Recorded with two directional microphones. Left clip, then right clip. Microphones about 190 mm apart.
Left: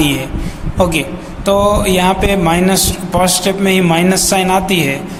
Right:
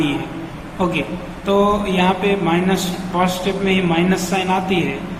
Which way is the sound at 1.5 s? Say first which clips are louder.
Left 5 dB; 50° left (ahead or behind).